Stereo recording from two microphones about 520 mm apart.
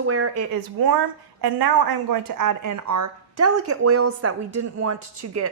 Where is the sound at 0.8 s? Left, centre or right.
Right.